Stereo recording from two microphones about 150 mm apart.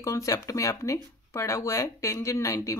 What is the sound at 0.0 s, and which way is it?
Speech, 20° left (ahead or behind).